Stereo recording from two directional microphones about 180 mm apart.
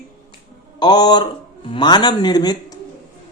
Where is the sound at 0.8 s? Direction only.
25° left (ahead or behind).